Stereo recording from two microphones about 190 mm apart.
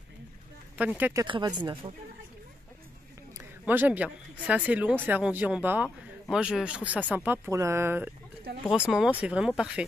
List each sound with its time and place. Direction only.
0.7 s speech: 10° right (ahead or behind)
1.2 s speech: 25° right (ahead or behind)
3.3 s a woman's voice: 10° right (ahead or behind)